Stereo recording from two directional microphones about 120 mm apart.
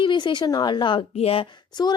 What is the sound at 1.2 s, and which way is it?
Speech, 55° left (ahead or behind).